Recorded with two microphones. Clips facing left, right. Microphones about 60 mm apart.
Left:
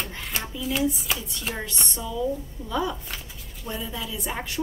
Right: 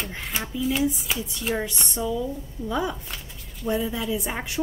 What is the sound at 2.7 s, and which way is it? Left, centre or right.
Speech, centre.